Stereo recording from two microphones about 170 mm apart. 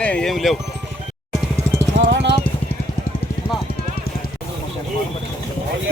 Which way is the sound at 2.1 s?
90° right.